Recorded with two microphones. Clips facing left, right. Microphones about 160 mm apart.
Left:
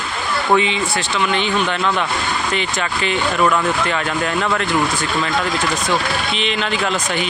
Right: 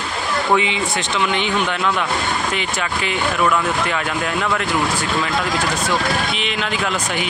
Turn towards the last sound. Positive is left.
turn(degrees=-10)  # may be behind; listen again after turning